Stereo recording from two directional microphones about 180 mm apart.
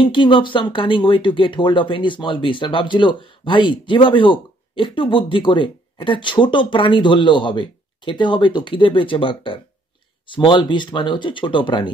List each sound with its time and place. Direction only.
0.0 s speech: 25° left (ahead or behind)